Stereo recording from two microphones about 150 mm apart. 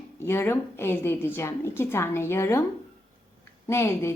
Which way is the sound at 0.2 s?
15° left (ahead or behind).